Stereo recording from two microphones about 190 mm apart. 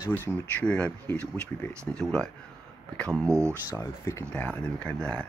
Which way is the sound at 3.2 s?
15° right (ahead or behind).